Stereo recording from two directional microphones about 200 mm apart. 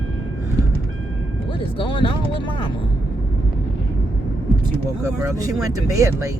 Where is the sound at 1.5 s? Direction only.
25° left (ahead or behind).